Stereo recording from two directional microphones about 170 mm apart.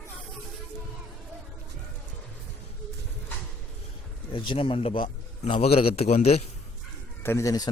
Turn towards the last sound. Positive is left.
turn(degrees=20)  # may be behind; listen again after turning